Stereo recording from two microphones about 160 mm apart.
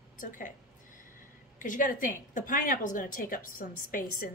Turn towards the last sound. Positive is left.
turn(degrees=60)  # may be behind; listen again after turning